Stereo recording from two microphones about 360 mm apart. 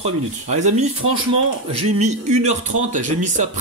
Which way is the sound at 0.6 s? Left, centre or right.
Centre.